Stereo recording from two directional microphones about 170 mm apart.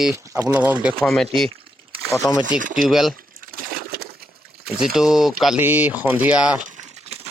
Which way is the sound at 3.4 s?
60° right (ahead or behind).